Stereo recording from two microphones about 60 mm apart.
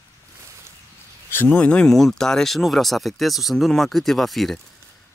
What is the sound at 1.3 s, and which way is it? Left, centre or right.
Speech, left.